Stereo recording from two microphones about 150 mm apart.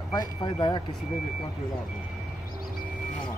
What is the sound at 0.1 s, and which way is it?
Speech, 30° left (ahead or behind).